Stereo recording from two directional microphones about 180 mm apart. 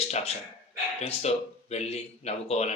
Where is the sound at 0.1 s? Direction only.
35° left (ahead or behind).